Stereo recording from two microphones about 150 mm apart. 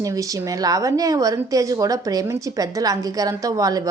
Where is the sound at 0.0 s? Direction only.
25° right (ahead or behind).